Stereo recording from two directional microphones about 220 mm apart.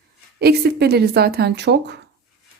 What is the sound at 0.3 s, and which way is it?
A woman's voice, 45° right (ahead or behind).